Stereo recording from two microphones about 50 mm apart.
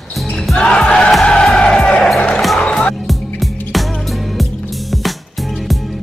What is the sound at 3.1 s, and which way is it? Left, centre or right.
Music, centre.